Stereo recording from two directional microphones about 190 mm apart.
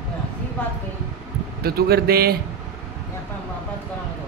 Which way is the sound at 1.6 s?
55° right (ahead or behind).